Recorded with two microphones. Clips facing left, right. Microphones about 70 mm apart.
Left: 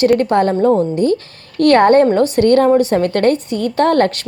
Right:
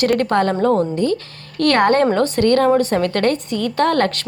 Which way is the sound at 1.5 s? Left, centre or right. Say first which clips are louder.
Left 5 dB; left.